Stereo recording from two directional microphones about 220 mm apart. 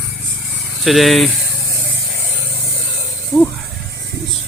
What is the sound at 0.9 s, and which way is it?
Speech, centre (ahead or behind).